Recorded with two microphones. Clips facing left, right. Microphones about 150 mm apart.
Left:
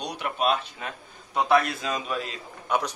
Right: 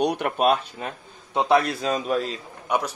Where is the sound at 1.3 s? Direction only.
30° right (ahead or behind).